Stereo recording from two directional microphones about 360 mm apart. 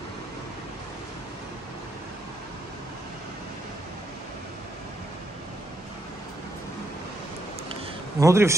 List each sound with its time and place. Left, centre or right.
8.2 s a man's voice: centre